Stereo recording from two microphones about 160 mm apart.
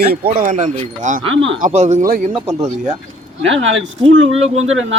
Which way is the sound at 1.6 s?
45° right (ahead or behind).